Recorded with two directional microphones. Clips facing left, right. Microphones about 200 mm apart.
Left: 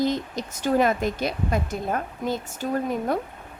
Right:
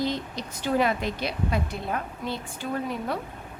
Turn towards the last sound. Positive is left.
turn(degrees=45)  # may be behind; listen again after turning